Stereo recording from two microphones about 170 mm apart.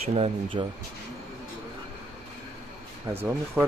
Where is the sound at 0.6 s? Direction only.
30° right (ahead or behind).